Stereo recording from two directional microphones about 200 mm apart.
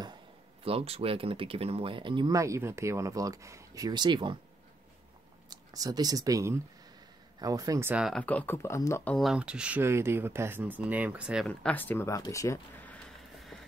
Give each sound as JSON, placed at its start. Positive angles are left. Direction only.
{"t": 0.7, "sound": "speech", "side_deg": -30}
{"t": 5.7, "sound": "speech", "side_deg": -20}
{"t": 7.9, "sound": "speech", "side_deg": 0}
{"t": 11.4, "sound": "a sound", "side_deg": 5}